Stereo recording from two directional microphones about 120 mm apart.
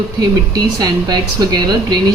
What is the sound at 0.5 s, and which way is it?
A woman's voice, 35° right (ahead or behind).